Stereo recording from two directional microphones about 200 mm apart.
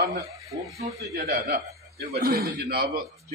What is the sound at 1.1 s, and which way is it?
A man's voice, 50° right (ahead or behind).